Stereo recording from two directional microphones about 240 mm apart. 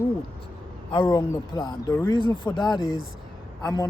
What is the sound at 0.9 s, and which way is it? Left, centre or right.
A man's voice, centre.